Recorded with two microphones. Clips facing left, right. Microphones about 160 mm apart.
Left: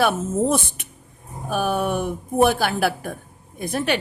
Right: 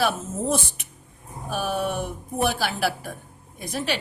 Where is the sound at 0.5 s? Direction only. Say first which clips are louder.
Left 3 dB; 55° left (ahead or behind).